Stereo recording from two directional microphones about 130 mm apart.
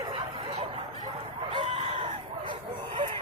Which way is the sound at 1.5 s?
40° right (ahead or behind).